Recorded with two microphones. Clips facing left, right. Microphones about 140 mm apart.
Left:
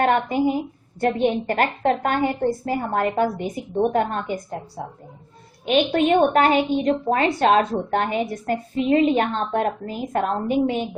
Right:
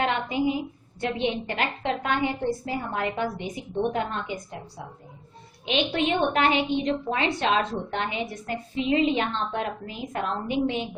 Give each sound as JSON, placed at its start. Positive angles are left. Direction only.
{"t": 0.0, "sound": "a woman's voice", "side_deg": 50}
{"t": 5.6, "sound": "a woman's voice", "side_deg": 45}